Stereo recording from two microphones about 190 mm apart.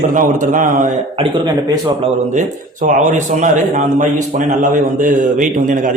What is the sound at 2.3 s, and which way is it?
A man's voice, 40° right (ahead or behind).